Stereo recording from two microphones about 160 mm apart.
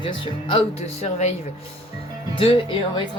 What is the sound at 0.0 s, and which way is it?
Speech, 35° left (ahead or behind).